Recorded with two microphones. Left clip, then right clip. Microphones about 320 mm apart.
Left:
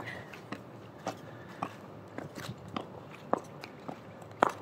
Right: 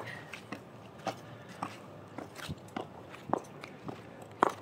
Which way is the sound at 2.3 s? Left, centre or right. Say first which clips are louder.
Even; centre.